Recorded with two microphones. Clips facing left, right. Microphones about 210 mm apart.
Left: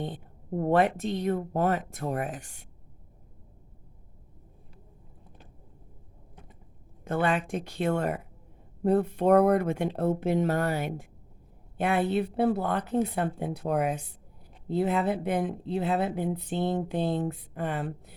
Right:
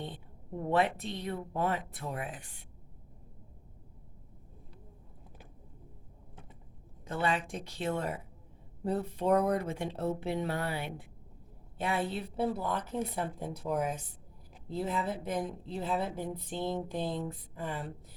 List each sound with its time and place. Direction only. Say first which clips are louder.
0.0 s a woman's voice: left 7 dB; 45° left (ahead or behind)
7.0 s speech: left 5 dB; 55° left (ahead or behind)
11.8 s a woman's voice: left 7 dB; 60° left (ahead or behind)